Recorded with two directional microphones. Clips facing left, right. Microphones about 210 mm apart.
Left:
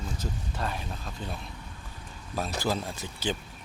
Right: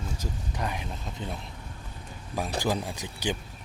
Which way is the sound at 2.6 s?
15° right (ahead or behind).